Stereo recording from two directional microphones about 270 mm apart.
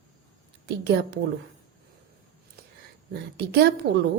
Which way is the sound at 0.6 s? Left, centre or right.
Right.